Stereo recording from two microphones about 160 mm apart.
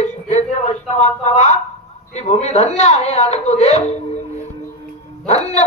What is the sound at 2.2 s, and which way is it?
A woman's voice, 40° left (ahead or behind).